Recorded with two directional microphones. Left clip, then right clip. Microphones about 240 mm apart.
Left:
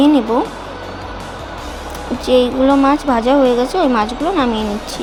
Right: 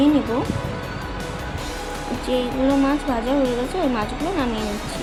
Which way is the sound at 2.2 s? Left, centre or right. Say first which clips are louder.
Left 9 dB; centre.